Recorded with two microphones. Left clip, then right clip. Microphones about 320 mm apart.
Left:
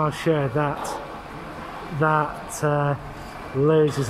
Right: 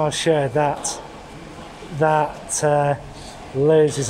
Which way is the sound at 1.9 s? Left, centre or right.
Right.